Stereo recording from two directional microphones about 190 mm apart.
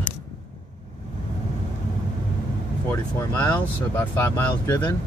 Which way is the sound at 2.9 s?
15° left (ahead or behind).